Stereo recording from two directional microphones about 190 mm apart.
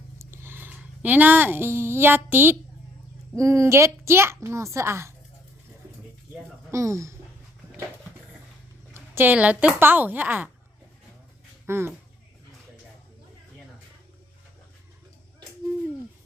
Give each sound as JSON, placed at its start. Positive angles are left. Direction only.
{"t": 0.2, "sound": "a woman's voice", "side_deg": -15}
{"t": 6.7, "sound": "speech", "side_deg": -15}
{"t": 8.9, "sound": "a woman's voice", "side_deg": -10}
{"t": 11.6, "sound": "speech", "side_deg": -10}